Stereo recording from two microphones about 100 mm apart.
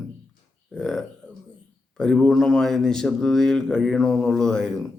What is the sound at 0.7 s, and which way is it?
A man's voice, 5° left (ahead or behind).